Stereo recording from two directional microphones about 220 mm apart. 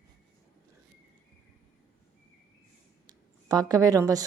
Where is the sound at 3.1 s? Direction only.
15° right (ahead or behind).